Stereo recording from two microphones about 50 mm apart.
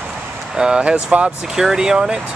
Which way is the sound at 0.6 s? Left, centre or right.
Centre.